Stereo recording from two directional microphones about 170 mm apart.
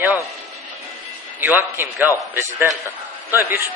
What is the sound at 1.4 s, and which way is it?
Speech, 10° right (ahead or behind).